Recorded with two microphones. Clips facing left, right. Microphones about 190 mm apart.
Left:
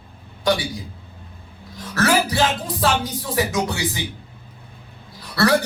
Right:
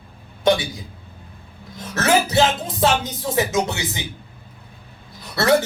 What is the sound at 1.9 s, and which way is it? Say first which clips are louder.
Speech: right 1 dB; 25° right (ahead or behind).